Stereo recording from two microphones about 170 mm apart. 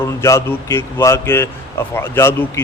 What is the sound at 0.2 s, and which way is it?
A man's voice, 15° left (ahead or behind).